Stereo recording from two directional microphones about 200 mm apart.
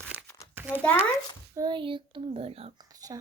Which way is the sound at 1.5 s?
20° right (ahead or behind).